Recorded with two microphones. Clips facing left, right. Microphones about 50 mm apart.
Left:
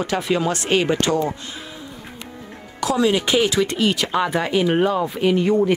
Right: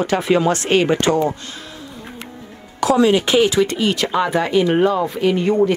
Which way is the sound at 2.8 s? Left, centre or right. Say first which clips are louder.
Right 4 dB; centre.